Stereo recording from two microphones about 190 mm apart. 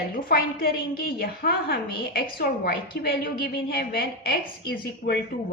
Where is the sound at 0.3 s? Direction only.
50° left (ahead or behind).